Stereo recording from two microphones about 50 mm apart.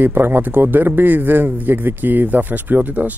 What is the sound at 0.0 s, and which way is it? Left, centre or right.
Speech, right.